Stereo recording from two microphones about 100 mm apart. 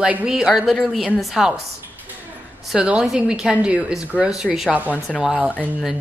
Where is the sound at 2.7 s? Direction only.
10° right (ahead or behind).